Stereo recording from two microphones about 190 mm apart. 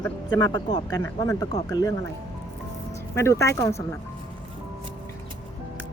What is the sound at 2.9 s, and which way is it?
Speech, 15° left (ahead or behind).